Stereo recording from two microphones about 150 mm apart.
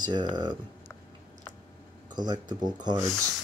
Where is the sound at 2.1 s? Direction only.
30° right (ahead or behind).